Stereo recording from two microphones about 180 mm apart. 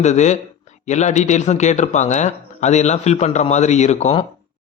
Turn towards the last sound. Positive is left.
turn(degrees=40)  # may be behind; listen again after turning